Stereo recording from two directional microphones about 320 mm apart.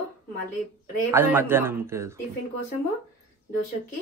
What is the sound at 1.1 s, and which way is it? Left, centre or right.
Speech, centre.